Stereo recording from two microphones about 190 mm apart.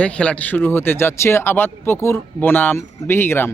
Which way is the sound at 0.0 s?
5° left (ahead or behind).